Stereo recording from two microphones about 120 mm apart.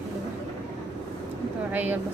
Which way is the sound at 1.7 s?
15° right (ahead or behind).